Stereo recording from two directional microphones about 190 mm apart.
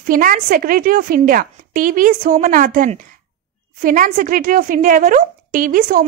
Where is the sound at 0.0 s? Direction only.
45° right (ahead or behind).